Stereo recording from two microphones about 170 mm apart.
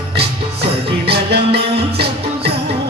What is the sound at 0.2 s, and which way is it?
Music, 70° right (ahead or behind).